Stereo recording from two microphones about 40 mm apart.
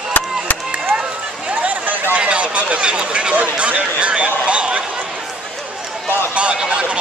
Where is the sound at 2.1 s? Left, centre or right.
Right.